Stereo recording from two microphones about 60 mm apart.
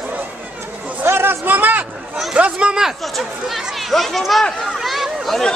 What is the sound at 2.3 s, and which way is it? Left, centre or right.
Speech, centre.